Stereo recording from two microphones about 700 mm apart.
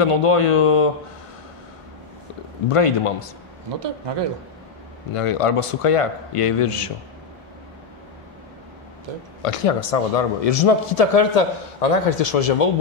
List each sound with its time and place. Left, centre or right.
0.0 s a man's voice: left
2.7 s a man's voice: left
5.1 s a man's voice: left
9.4 s a man's voice: left